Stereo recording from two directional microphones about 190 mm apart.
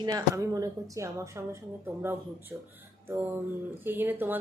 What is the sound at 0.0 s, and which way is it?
A woman's voice, 20° right (ahead or behind).